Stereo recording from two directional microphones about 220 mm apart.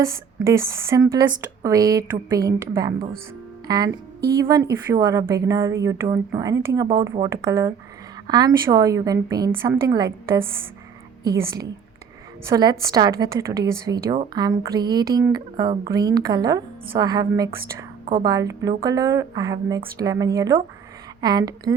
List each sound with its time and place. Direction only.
0.4 s a woman's voice: 15° right (ahead or behind)
3.8 s a woman's voice: 45° right (ahead or behind)
4.4 s a woman's voice: 15° right (ahead or behind)